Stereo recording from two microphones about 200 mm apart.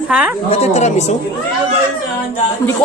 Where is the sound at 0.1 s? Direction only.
10° right (ahead or behind).